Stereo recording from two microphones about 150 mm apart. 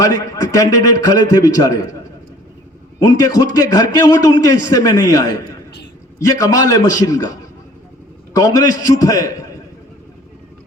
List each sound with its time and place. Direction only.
0.0 s a man's voice: 25° left (ahead or behind)
3.0 s a man's voice: 25° left (ahead or behind)
8.4 s a man's voice: 25° left (ahead or behind)